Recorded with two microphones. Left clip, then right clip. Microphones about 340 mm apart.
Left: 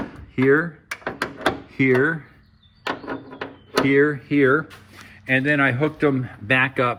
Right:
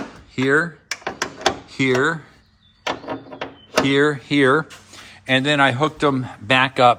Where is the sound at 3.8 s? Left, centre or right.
Centre.